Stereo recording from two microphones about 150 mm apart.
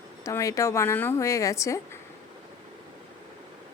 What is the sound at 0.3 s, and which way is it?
A woman's voice, 20° left (ahead or behind).